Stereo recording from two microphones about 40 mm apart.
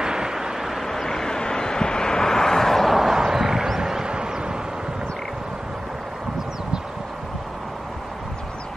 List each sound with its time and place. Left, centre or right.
0.0 s vehicle: centre
0.7 s vehicle: centre
3.0 s a sound: centre